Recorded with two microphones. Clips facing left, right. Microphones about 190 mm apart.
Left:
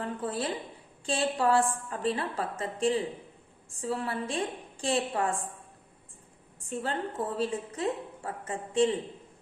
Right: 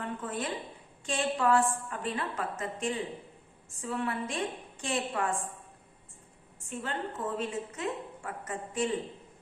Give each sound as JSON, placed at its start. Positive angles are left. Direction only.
{"t": 0.0, "sound": "a woman's voice", "side_deg": 35}
{"t": 6.7, "sound": "a woman's voice", "side_deg": 35}